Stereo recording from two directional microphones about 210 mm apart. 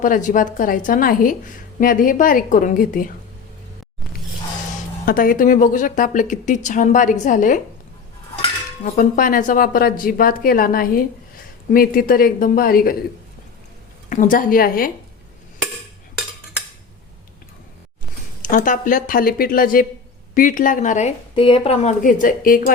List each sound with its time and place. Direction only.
0.0 s a woman's voice: 40° left (ahead or behind)
5.0 s a woman's voice: 40° left (ahead or behind)
8.8 s speech: 40° left (ahead or behind)
14.1 s a woman's voice: 40° left (ahead or behind)
18.4 s a woman's voice: 40° left (ahead or behind)